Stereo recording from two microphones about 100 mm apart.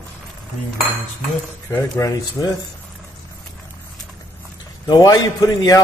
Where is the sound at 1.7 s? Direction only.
30° left (ahead or behind).